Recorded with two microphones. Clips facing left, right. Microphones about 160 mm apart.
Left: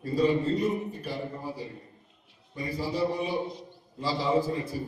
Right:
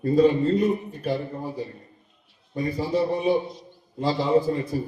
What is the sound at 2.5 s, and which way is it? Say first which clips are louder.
A man's voice: right 7 dB; 55° right (ahead or behind).